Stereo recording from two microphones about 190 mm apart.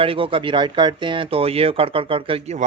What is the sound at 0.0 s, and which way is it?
Speech, 30° right (ahead or behind).